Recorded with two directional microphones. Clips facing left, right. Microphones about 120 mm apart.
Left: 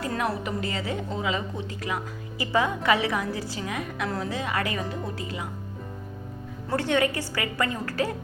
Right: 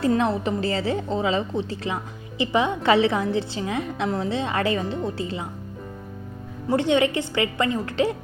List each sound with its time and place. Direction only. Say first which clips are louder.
0.0 s a woman's voice: right 7 dB; 25° right (ahead or behind)
6.7 s a woman's voice: right 4 dB; 20° right (ahead or behind)